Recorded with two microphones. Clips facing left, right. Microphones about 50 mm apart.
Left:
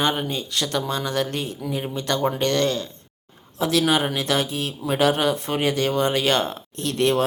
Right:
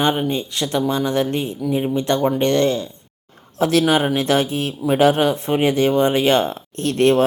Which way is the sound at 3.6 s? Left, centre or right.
Right.